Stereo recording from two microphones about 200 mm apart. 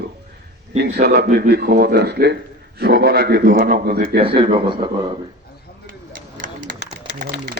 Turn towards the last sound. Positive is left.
turn(degrees=-45)  # may be behind; listen again after turning